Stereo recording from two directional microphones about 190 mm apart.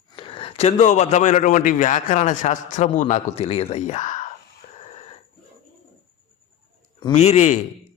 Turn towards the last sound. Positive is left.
turn(degrees=35)  # may be behind; listen again after turning